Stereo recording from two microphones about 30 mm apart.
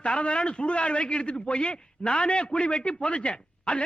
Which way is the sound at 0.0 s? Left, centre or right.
Left.